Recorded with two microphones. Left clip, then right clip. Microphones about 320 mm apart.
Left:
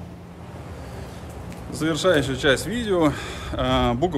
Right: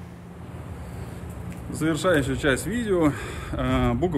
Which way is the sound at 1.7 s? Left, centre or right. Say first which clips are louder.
Left 2 dB; centre.